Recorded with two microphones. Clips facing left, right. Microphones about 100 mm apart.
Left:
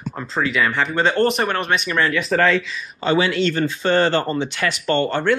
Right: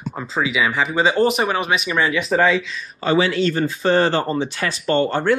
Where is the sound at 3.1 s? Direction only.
40° right (ahead or behind).